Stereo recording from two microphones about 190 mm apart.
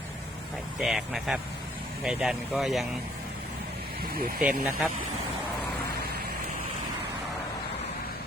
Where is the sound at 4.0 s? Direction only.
50° right (ahead or behind).